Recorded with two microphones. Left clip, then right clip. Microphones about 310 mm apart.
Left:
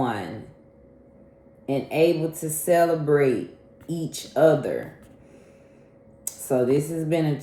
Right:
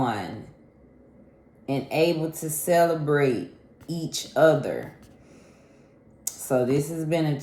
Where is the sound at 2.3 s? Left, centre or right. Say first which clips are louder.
Left 2 dB; centre.